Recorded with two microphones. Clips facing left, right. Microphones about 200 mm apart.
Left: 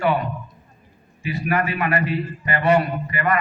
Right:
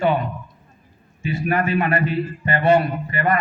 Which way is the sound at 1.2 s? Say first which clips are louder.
Right 1 dB; 25° right (ahead or behind).